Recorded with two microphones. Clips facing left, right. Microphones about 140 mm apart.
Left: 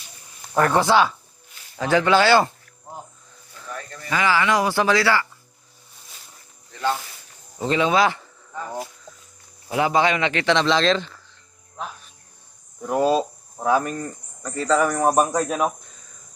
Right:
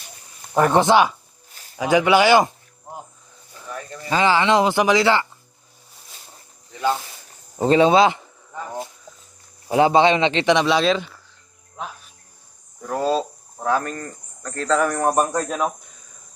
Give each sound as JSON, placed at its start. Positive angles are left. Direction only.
{"t": 0.5, "sound": "speech", "side_deg": -20}
{"t": 3.5, "sound": "a sound", "side_deg": -15}
{"t": 4.1, "sound": "speech", "side_deg": -25}
{"t": 6.7, "sound": "speech", "side_deg": -15}
{"t": 7.6, "sound": "speech", "side_deg": -35}
{"t": 9.6, "sound": "speech", "side_deg": -30}
{"t": 12.8, "sound": "speech", "side_deg": 15}